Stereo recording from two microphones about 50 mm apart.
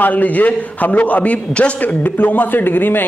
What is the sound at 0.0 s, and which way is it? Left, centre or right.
A man's voice, left.